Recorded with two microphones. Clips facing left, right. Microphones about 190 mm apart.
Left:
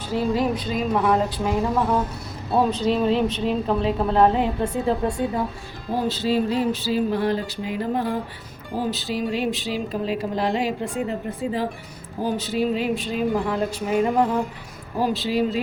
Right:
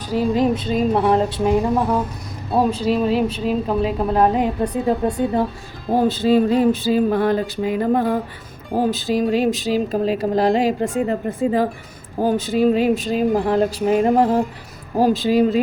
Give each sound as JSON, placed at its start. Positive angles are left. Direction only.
{"t": 0.1, "sound": "a woman's voice", "side_deg": -15}
{"t": 0.7, "sound": "speech", "side_deg": -30}
{"t": 2.6, "sound": "a woman's voice", "side_deg": -10}
{"t": 5.9, "sound": "speech", "side_deg": -50}